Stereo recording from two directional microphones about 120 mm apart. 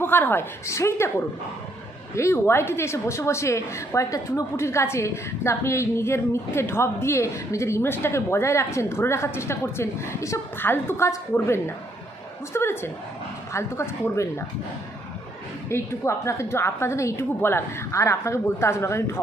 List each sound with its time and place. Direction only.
0.0 s a woman's voice: 20° left (ahead or behind)
2.1 s a woman's voice: 20° left (ahead or behind)
15.7 s a woman's voice: 25° left (ahead or behind)